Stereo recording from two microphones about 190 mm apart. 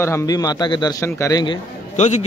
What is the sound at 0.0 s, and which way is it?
Speech, 15° left (ahead or behind).